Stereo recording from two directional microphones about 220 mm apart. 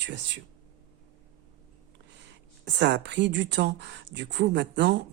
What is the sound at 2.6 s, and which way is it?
Speech, 50° right (ahead or behind).